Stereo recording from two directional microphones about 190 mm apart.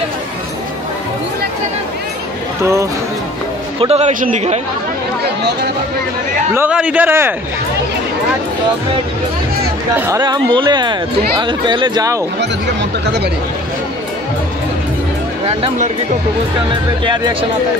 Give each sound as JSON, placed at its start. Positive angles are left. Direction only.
{"t": 2.6, "sound": "a man's voice", "side_deg": -15}
{"t": 3.8, "sound": "speech", "side_deg": -30}
{"t": 6.5, "sound": "a man's voice", "side_deg": -10}
{"t": 9.9, "sound": "a man's voice", "side_deg": -10}
{"t": 10.2, "sound": "speech", "side_deg": -25}
{"t": 13.0, "sound": "speech", "side_deg": -60}
{"t": 15.4, "sound": "speech", "side_deg": -35}
{"t": 17.0, "sound": "speech", "side_deg": -25}